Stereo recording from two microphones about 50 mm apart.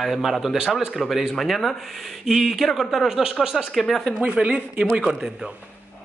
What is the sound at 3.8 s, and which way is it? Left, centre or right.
Speech, centre.